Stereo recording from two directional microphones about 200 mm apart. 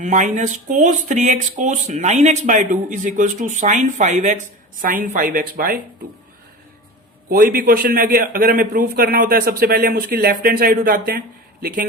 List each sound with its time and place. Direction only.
0.0 s a man's voice: 40° right (ahead or behind)
7.3 s a man's voice: 45° right (ahead or behind)